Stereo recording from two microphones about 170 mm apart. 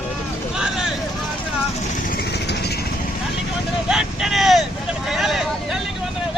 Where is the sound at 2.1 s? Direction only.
75° left (ahead or behind).